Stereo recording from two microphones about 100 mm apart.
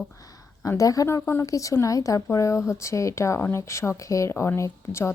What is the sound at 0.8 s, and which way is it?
Speech, 35° left (ahead or behind).